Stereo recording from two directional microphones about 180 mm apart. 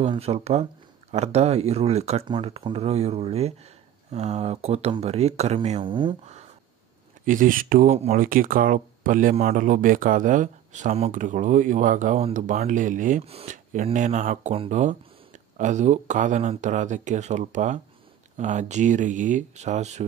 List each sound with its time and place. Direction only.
0.1 s speech: 35° right (ahead or behind)
7.2 s speech: 50° right (ahead or behind)
13.2 s speech: 35° right (ahead or behind)